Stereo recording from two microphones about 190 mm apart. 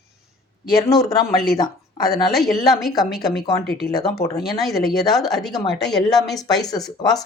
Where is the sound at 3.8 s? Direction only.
55° left (ahead or behind).